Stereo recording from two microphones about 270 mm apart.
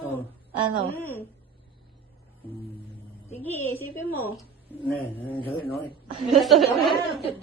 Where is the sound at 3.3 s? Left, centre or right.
Centre.